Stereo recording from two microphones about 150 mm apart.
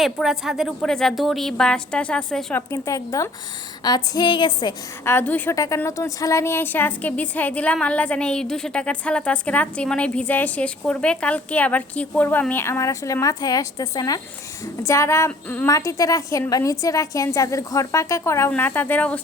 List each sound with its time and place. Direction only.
0.0 s a woman's voice: centre (ahead or behind); by 4.7 s 30° left (ahead or behind)
5.0 s a woman's voice: 10° left (ahead or behind)
15.7 s a woman's voice: 20° left (ahead or behind)